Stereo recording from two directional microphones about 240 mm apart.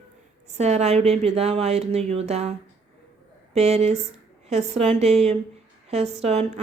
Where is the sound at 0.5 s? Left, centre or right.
Right.